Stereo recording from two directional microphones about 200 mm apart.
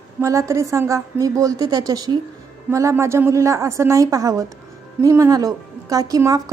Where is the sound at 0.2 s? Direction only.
15° right (ahead or behind).